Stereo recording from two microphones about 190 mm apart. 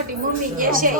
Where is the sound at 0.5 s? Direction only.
45° right (ahead or behind).